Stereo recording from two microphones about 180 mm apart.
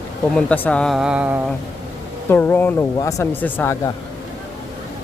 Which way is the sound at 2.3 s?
10° left (ahead or behind).